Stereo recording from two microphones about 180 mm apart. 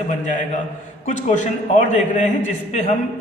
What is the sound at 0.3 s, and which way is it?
A man's voice, 45° left (ahead or behind).